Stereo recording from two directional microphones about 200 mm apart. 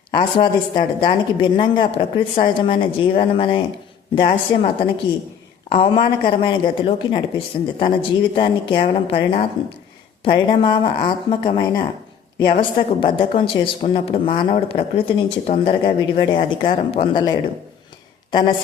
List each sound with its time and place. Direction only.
0.1 s a woman's voice: 25° left (ahead or behind)